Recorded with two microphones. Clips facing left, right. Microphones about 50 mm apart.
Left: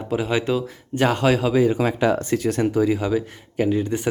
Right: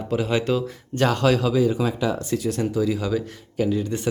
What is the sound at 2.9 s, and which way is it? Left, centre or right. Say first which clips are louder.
Speech: left 2 dB; left.